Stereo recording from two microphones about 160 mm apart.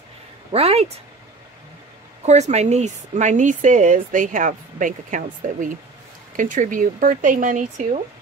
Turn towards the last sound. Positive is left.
turn(degrees=-50)  # may be behind; listen again after turning